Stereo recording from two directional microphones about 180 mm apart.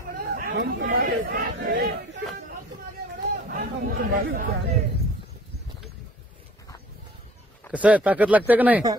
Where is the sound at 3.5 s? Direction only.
55° right (ahead or behind).